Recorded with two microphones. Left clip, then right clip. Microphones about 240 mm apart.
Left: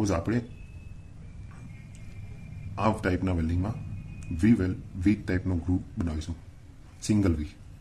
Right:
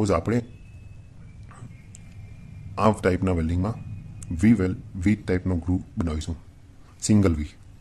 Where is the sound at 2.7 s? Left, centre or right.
Right.